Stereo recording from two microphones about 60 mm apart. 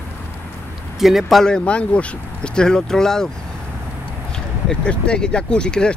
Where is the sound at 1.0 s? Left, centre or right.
Centre.